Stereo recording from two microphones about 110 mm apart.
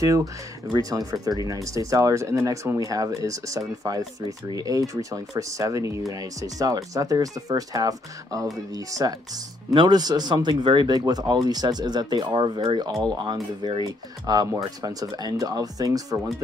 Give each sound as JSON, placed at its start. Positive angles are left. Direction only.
{"t": 0.0, "sound": "speech", "side_deg": -30}